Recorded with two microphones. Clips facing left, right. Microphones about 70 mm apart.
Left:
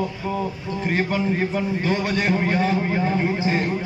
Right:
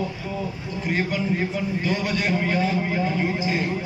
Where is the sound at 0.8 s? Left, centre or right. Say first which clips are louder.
Left 2 dB; left.